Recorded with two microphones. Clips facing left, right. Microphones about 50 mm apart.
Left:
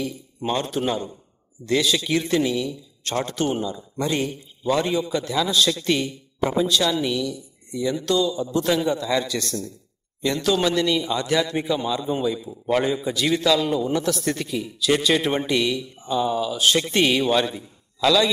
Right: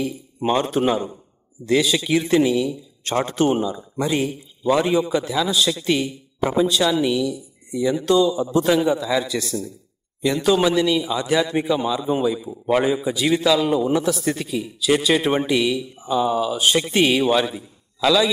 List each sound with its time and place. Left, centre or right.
0.7 s a man's voice: centre
3.0 s a man's voice: right
3.6 s a man's voice: centre